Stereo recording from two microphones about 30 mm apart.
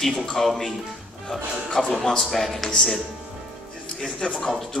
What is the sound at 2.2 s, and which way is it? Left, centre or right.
Speech, centre.